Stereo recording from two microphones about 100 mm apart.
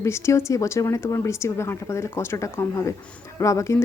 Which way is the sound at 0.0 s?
30° left (ahead or behind).